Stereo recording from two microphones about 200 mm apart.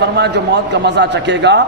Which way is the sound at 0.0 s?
60° right (ahead or behind).